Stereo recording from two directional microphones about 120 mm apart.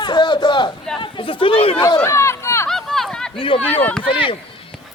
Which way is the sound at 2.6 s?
5° left (ahead or behind).